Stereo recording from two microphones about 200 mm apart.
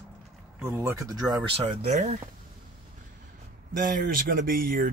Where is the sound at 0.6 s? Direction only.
15° right (ahead or behind).